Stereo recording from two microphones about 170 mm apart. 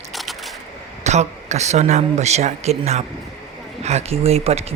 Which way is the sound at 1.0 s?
40° right (ahead or behind).